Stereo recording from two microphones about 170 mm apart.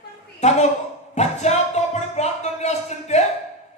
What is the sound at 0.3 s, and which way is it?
Speech, 40° left (ahead or behind).